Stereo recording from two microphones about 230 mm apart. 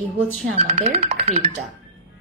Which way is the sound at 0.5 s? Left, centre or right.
Right.